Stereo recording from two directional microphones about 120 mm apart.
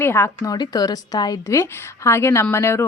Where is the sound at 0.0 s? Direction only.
20° left (ahead or behind).